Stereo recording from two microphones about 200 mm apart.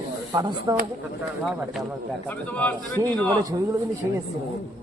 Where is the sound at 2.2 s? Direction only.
10° left (ahead or behind).